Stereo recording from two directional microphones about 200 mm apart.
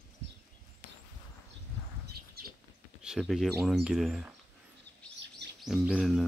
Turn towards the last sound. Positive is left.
turn(degrees=0)  # may be behind; listen again after turning